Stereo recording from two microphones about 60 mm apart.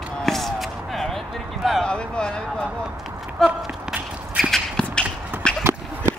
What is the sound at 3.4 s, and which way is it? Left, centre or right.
Walk, centre.